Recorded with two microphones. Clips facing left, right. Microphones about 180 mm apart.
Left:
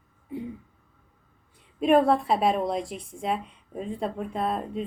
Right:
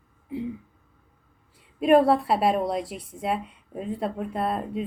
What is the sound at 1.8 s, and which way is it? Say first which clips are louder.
A woman's voice: right 2 dB; 5° right (ahead or behind).